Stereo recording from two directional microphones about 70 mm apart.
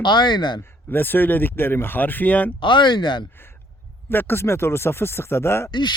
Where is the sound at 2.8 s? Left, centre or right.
Left.